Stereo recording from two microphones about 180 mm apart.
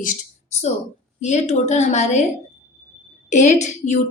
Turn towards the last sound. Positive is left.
turn(degrees=40)  # may be behind; listen again after turning